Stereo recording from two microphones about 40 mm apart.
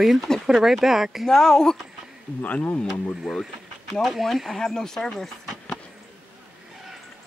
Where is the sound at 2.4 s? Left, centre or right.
Left.